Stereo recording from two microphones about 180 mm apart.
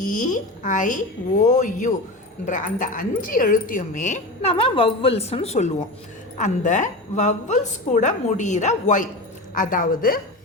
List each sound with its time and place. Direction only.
0.0 s speech: 45° left (ahead or behind)
4.5 s a woman's voice: 30° left (ahead or behind); by 10.2 s 50° left (ahead or behind)